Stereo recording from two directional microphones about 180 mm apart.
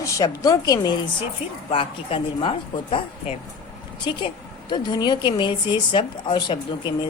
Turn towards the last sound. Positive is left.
turn(degrees=25)  # may be behind; listen again after turning